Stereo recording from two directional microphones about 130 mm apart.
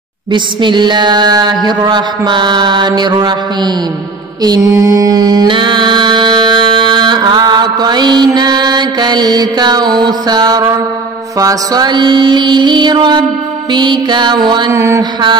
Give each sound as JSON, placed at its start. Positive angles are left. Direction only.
{"t": 0.3, "sound": "mantra", "side_deg": -40}
{"t": 14.7, "sound": "mantra", "side_deg": -20}